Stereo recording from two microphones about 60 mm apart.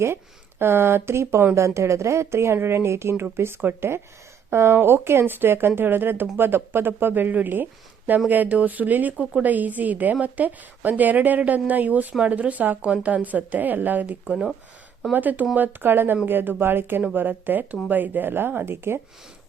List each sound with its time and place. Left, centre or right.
0.6 s a woman's voice: right